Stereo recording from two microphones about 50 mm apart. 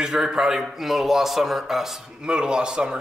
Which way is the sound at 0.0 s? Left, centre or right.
Centre.